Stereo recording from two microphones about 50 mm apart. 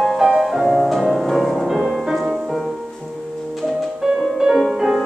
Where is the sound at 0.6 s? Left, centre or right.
Centre.